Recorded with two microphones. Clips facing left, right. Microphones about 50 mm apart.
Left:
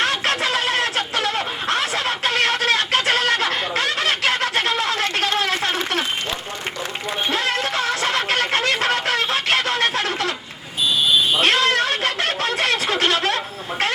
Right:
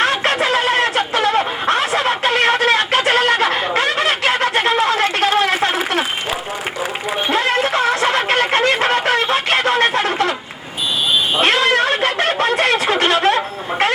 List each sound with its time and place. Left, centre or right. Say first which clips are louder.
0.0 s a sound: right 4 dB; centre
7.3 s music: right 6 dB; centre
11.3 s cat: right 3 dB; centre